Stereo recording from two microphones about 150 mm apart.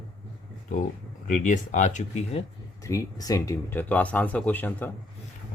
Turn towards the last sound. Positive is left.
turn(degrees=10)  # may be behind; listen again after turning